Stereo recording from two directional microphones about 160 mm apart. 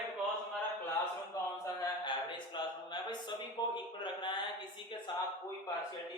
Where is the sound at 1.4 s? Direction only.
20° left (ahead or behind).